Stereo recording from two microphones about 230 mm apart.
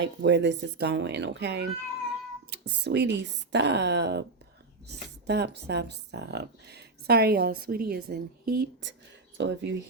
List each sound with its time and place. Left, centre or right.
0.0 s speech: right